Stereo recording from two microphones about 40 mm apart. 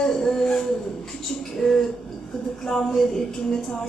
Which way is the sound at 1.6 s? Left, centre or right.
Left.